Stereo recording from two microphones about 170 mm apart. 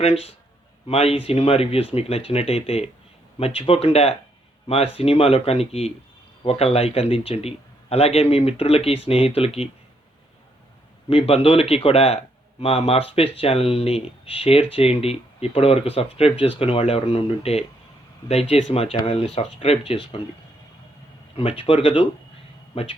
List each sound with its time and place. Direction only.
0.0 s speech: 35° left (ahead or behind)
11.1 s speech: 35° left (ahead or behind)
21.3 s speech: 35° left (ahead or behind)